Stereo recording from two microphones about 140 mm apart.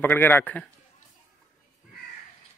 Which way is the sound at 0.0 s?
15° left (ahead or behind).